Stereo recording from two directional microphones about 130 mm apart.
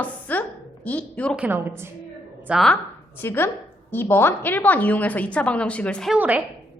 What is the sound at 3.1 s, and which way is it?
A woman's voice, 15° left (ahead or behind).